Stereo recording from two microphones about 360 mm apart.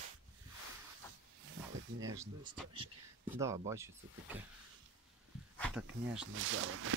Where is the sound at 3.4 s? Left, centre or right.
Centre.